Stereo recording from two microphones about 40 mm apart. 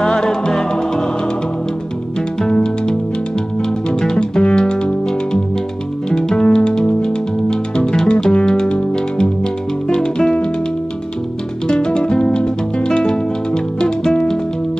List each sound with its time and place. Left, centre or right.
0.0 s music: centre
2.6 s music: left
4.2 s music: left
11.6 s music: left